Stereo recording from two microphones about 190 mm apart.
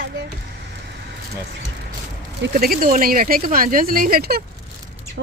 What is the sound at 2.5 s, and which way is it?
Speech, 50° right (ahead or behind).